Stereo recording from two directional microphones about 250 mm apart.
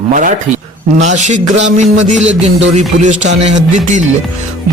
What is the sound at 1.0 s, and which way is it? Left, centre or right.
A man's voice, right.